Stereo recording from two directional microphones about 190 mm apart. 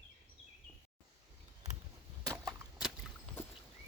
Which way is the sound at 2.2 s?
20° right (ahead or behind).